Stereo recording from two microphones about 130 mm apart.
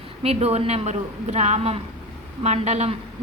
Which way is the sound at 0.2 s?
50° right (ahead or behind).